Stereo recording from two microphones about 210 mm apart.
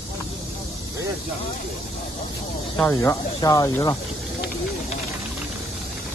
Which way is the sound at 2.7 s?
15° left (ahead or behind).